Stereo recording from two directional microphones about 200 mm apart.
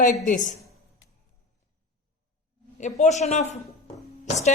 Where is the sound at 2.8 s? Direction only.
35° left (ahead or behind).